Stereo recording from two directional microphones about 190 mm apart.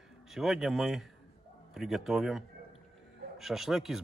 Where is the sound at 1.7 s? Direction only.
5° right (ahead or behind).